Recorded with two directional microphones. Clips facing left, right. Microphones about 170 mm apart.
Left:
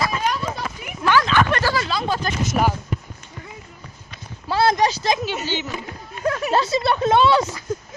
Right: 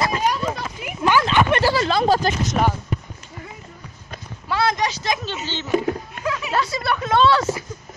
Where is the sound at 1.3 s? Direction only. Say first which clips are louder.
Right 2 dB; 25° right (ahead or behind).